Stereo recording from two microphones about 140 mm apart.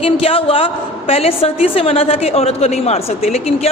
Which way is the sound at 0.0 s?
45° left (ahead or behind).